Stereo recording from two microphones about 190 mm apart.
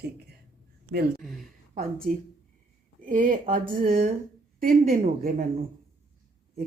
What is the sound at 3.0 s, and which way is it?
Speech, 45° right (ahead or behind).